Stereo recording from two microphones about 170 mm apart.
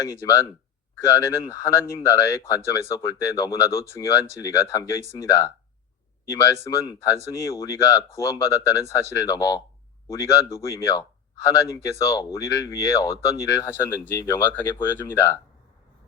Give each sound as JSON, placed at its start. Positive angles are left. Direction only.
{"t": 0.0, "sound": "speech", "side_deg": 20}